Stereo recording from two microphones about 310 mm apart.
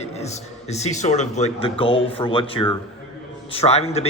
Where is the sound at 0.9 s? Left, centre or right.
Left.